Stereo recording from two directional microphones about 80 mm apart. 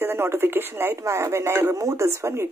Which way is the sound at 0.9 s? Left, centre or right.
Right.